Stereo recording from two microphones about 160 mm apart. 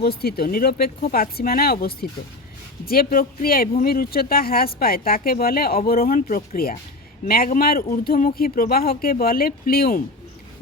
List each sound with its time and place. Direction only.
0.0 s speech: 75° left (ahead or behind)